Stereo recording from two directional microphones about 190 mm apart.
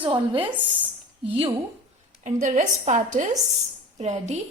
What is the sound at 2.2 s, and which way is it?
A woman's voice, 40° right (ahead or behind).